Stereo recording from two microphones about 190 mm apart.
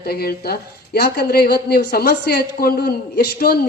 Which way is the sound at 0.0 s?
55° left (ahead or behind).